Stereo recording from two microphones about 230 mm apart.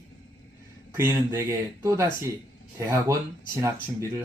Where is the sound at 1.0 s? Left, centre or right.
Centre.